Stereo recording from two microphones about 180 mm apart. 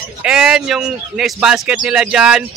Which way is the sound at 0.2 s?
5° right (ahead or behind).